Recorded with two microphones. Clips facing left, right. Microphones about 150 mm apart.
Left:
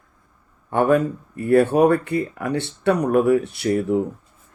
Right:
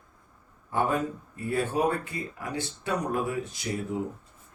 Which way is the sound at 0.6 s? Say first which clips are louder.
Left 9 dB; 65° left (ahead or behind).